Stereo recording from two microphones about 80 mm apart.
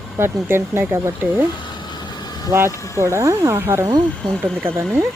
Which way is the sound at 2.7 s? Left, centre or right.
Left.